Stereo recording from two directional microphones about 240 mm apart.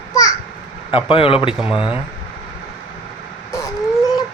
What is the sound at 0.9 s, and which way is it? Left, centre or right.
Speech, left.